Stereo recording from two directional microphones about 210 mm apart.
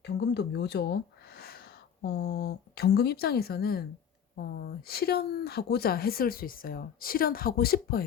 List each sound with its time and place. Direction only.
0.0 s speech: 55° left (ahead or behind)